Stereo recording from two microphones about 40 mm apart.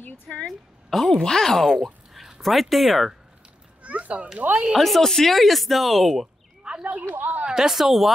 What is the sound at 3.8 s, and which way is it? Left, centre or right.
Speech, right.